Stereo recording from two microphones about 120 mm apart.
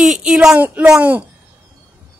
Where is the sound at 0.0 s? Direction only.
5° right (ahead or behind).